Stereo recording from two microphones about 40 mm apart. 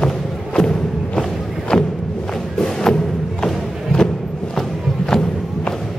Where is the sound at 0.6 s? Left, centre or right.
Centre.